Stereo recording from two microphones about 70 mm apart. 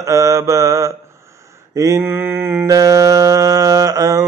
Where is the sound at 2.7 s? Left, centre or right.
Right.